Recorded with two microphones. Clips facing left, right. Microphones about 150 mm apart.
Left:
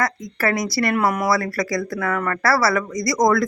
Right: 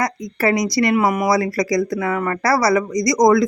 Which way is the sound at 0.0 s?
20° right (ahead or behind).